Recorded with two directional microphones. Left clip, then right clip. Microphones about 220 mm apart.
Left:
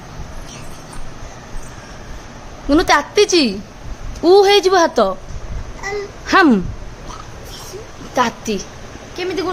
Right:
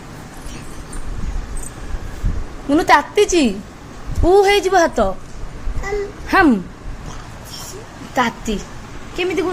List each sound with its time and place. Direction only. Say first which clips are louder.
2.6 s a woman's voice: right 1 dB; 10° left (ahead or behind)
8.1 s a woman's voice: left 1 dB; 10° left (ahead or behind)
9.2 s a woman's voice: right 2 dB; centre (ahead or behind)